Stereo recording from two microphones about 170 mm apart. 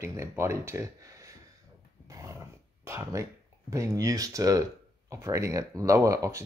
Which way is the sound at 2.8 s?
15° right (ahead or behind).